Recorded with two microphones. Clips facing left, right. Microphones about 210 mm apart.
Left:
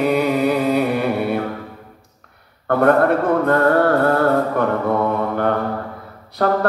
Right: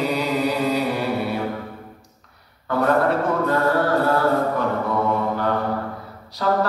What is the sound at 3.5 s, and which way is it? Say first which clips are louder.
Music: left 5 dB; 55° left (ahead or behind).